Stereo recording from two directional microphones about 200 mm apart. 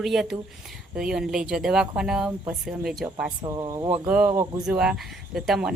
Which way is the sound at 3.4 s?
20° right (ahead or behind).